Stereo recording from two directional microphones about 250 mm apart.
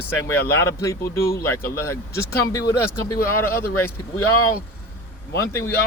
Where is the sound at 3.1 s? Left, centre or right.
Left.